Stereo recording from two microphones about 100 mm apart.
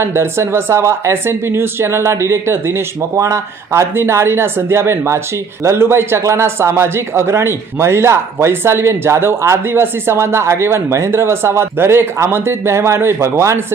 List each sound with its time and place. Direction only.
0.0 s a man's voice: 25° right (ahead or behind)